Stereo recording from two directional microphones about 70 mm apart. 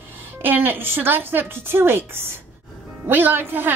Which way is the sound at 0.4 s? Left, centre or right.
Right.